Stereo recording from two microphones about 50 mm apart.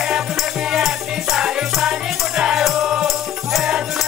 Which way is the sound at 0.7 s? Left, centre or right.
Centre.